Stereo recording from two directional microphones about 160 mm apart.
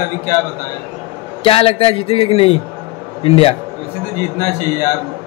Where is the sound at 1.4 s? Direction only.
35° left (ahead or behind).